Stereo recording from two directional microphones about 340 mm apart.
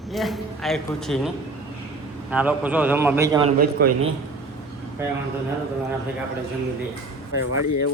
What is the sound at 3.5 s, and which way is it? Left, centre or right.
Speech, right.